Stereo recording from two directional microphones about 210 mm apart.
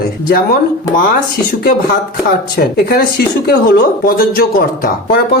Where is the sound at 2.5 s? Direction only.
45° left (ahead or behind).